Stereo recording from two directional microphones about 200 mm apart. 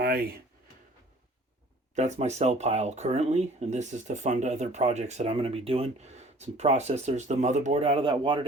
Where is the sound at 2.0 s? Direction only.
35° right (ahead or behind).